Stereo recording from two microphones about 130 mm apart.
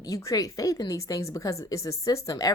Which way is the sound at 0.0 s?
25° left (ahead or behind).